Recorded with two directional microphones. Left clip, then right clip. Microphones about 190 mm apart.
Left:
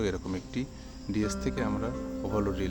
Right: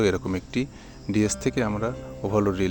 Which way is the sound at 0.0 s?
40° right (ahead or behind).